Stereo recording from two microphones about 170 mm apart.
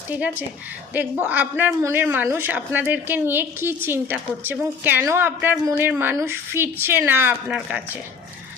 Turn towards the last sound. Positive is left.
turn(degrees=-5)  # may be behind; listen again after turning